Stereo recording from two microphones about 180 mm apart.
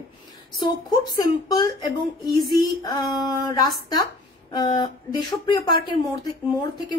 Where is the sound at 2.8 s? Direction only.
20° left (ahead or behind).